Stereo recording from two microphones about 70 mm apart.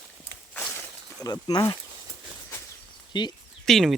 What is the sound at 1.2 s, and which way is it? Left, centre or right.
Speech, left.